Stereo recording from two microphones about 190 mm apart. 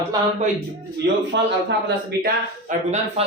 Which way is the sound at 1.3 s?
65° right (ahead or behind).